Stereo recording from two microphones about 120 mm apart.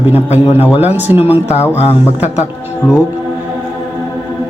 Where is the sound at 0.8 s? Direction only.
15° right (ahead or behind).